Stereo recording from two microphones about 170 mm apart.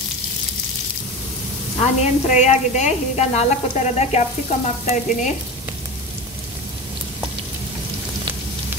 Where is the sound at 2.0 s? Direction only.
40° left (ahead or behind).